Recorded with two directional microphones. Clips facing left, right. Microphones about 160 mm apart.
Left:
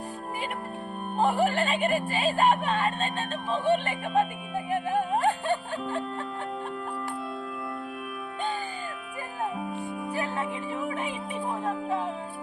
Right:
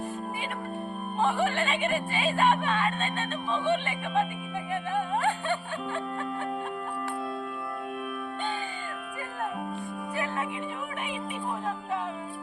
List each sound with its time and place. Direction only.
1.2 s speech: 40° left (ahead or behind)
10.1 s music: 30° left (ahead or behind)